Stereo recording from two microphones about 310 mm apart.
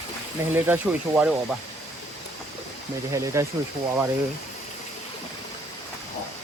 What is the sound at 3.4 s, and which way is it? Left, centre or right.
Speech, centre.